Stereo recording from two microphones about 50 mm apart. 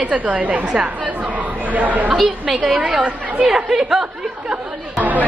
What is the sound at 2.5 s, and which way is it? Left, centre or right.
Speech, centre.